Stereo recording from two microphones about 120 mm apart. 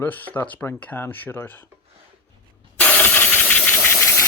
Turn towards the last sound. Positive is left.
turn(degrees=20)  # may be behind; listen again after turning